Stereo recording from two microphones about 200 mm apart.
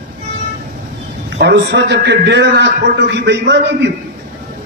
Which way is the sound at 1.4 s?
60° right (ahead or behind).